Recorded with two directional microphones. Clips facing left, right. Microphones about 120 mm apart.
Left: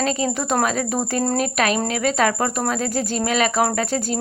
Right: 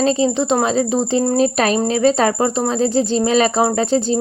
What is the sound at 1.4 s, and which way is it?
Speech, 30° right (ahead or behind).